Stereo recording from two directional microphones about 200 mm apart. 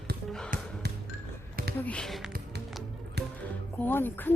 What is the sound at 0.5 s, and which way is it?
Music, 40° right (ahead or behind).